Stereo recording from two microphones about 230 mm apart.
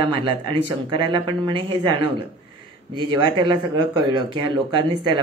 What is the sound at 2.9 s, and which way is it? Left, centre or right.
Speech, centre.